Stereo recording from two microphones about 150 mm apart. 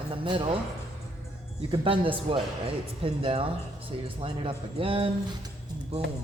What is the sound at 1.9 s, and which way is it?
Speech, 35° right (ahead or behind).